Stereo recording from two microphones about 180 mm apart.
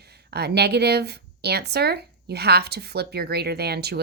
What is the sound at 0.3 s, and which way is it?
Speech, 65° right (ahead or behind).